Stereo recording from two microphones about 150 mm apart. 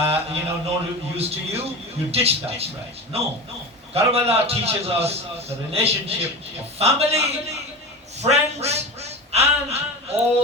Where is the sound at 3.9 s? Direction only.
45° right (ahead or behind).